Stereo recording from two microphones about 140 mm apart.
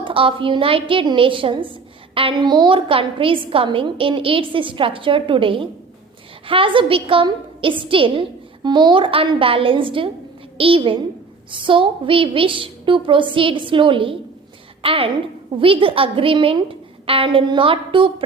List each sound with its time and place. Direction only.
0.0 s a woman's voice: 40° right (ahead or behind)